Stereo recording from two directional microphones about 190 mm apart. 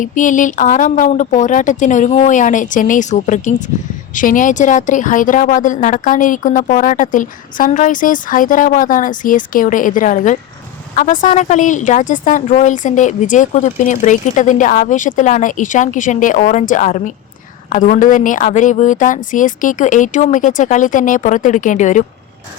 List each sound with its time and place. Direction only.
0.0 s a woman's voice: 45° left (ahead or behind)